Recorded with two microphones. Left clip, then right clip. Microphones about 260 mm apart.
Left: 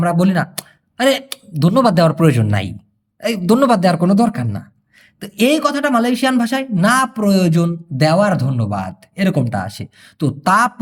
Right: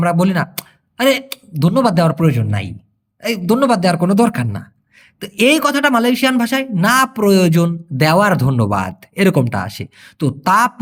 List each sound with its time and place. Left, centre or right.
0.0 s speech: centre